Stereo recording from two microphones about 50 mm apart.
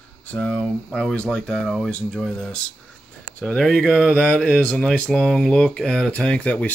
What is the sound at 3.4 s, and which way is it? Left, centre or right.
Speech, centre.